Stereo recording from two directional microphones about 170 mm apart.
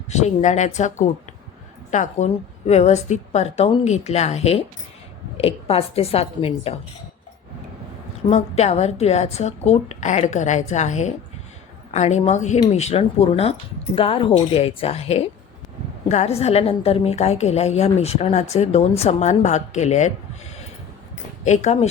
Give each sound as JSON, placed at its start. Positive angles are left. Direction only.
{"t": 0.1, "sound": "a woman's voice", "side_deg": 45}
{"t": 8.3, "sound": "a woman's voice", "side_deg": 40}
{"t": 21.4, "sound": "speech", "side_deg": 40}